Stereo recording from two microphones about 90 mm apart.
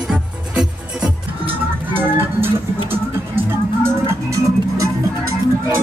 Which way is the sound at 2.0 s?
25° right (ahead or behind).